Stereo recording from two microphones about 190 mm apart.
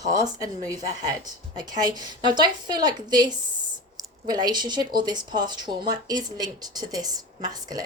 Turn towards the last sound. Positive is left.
turn(degrees=-20)  # may be behind; listen again after turning